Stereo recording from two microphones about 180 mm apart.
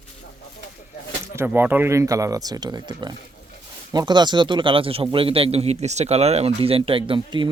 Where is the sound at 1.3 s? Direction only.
10° right (ahead or behind).